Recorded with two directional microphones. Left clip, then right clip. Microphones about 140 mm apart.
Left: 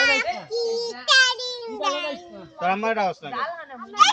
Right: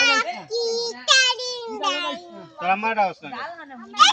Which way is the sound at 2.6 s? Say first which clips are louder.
Right 1 dB; 15° left (ahead or behind).